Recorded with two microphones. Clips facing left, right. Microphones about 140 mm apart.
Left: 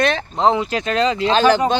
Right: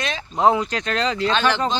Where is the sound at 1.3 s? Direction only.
40° left (ahead or behind).